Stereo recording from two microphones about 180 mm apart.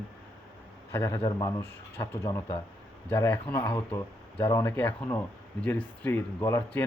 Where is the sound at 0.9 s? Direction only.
10° left (ahead or behind).